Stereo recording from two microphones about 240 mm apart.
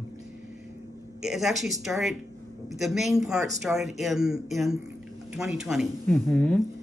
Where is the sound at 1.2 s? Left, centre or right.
Centre.